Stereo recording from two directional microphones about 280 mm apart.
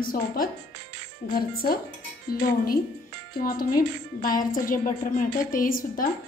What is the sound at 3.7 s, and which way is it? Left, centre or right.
Speech, left.